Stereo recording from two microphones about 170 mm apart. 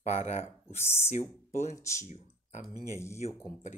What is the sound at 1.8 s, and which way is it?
Speech, 15° left (ahead or behind).